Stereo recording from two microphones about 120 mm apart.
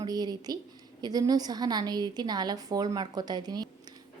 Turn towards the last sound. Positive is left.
turn(degrees=-35)  # may be behind; listen again after turning